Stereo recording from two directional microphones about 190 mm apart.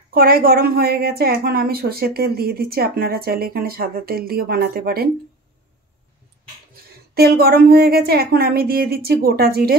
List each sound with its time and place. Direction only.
0.1 s a woman's voice: 50° right (ahead or behind)
6.7 s a woman's voice: 55° right (ahead or behind)